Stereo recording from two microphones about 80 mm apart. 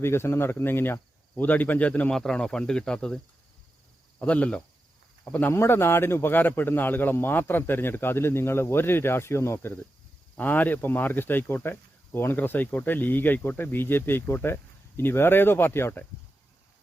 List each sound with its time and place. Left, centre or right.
0.0 s speech: left; by 2.1 s centre
2.1 s speech: centre
4.2 s speech: centre
5.5 s speech: left